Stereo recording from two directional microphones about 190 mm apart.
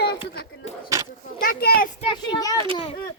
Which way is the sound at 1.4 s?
50° left (ahead or behind).